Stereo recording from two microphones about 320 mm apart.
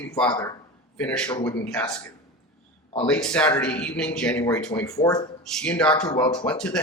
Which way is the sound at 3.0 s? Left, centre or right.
Centre.